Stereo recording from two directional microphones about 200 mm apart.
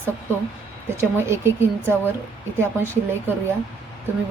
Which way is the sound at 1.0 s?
10° right (ahead or behind).